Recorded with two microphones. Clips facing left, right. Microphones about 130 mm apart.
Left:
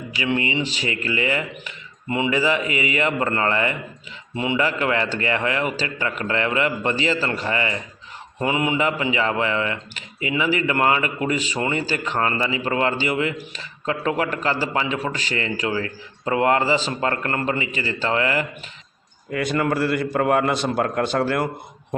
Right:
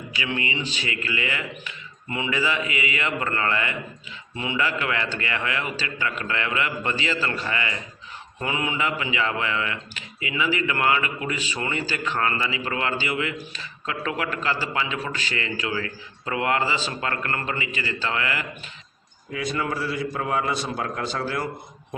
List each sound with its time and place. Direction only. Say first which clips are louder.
0.2 s a man's voice: left 6 dB; 30° left (ahead or behind)
19.3 s a man's voice: left 5 dB; 60° left (ahead or behind)